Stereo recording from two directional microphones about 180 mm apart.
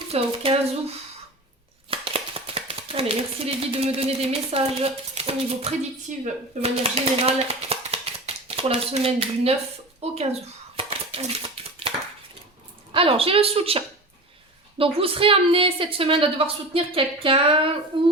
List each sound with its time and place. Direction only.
0.1 s a woman's voice: 35° right (ahead or behind)
10.8 s a sound: 35° right (ahead or behind)
12.9 s a woman's voice: 30° right (ahead or behind)